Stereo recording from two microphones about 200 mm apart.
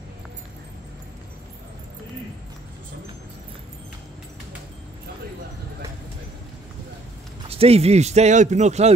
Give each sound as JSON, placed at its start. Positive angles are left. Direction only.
{"t": 7.4, "sound": "speech", "side_deg": -30}